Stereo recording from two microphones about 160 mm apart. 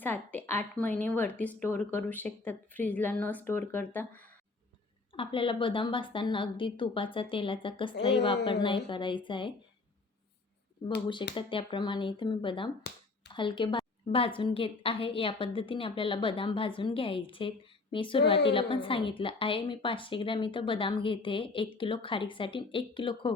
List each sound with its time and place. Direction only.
0.0 s a woman's voice: 10° left (ahead or behind)
5.1 s a woman's voice: 35° left (ahead or behind)
11.0 s a woman's voice: 30° left (ahead or behind)